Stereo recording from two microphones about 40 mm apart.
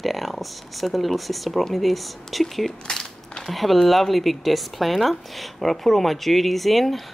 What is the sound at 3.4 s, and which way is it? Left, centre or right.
Speech, centre.